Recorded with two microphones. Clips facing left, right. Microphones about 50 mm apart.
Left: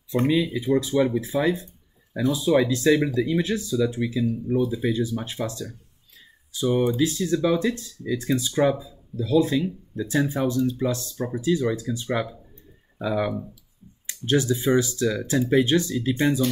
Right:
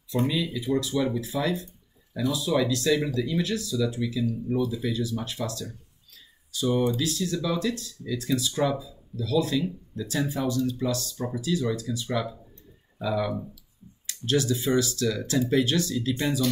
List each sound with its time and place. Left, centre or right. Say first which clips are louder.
0.1 s speech: left 5 dB; left